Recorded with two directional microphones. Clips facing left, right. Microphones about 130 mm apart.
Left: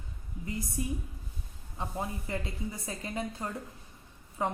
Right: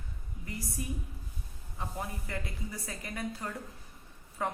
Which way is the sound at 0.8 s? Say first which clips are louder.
Left 3 dB; 25° left (ahead or behind).